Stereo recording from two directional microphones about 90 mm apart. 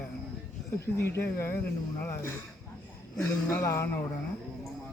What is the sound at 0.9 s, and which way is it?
Speech, 30° left (ahead or behind).